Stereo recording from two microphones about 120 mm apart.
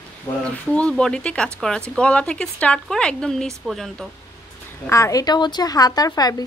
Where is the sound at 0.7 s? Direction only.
10° left (ahead or behind).